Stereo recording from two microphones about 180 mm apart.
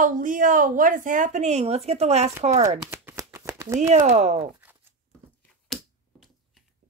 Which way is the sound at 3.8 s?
40° right (ahead or behind).